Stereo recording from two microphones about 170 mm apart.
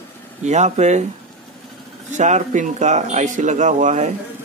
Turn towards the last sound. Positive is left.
turn(degrees=-45)  # may be behind; listen again after turning